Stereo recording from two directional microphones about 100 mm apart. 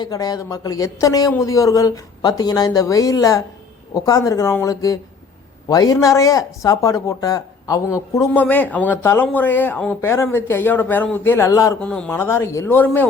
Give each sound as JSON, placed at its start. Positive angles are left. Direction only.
{"t": 0.0, "sound": "speech", "side_deg": 40}
{"t": 8.3, "sound": "a man's voice", "side_deg": 15}
{"t": 11.8, "sound": "speech", "side_deg": 10}
{"t": 12.1, "sound": "a man's voice", "side_deg": 25}